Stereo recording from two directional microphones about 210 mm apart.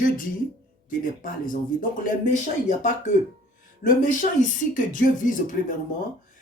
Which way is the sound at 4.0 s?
40° left (ahead or behind).